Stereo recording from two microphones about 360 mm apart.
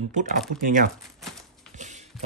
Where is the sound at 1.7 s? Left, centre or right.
Centre.